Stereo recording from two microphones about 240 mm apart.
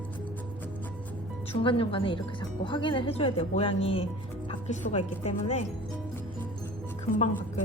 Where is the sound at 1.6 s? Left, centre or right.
Left.